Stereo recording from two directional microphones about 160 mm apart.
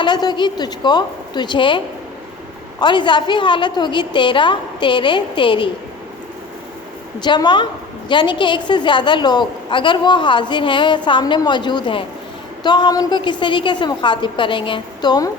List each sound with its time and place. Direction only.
0.0 s a woman's voice: 25° left (ahead or behind)
2.8 s a woman's voice: 30° left (ahead or behind)
7.2 s a woman's voice: 25° left (ahead or behind)